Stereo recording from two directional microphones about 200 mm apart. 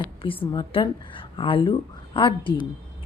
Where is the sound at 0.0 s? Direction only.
25° left (ahead or behind).